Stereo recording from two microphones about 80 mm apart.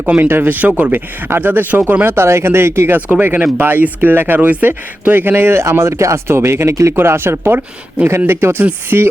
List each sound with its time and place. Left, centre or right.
0.2 s speech: right